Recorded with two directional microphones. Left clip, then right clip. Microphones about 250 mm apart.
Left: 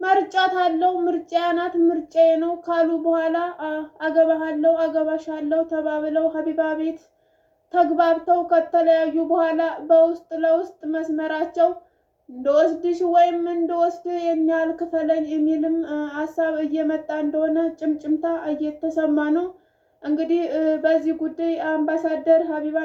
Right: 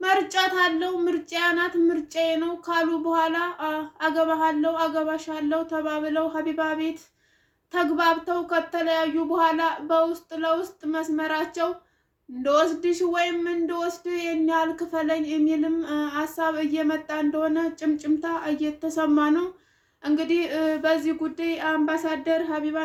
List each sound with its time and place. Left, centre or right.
0.0 s speech: right